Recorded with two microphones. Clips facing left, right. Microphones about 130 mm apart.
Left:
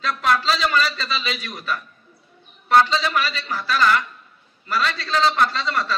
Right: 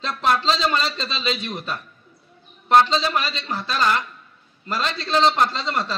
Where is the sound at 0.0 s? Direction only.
25° right (ahead or behind).